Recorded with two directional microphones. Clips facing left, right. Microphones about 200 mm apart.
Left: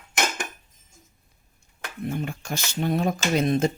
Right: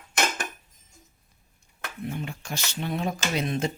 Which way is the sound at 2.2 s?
45° left (ahead or behind).